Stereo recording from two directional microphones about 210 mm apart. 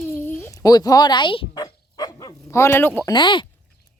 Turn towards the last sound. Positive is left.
turn(degrees=20)  # may be behind; listen again after turning